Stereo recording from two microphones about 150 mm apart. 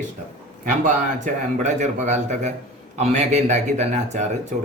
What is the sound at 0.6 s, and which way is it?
A man's voice, 60° right (ahead or behind).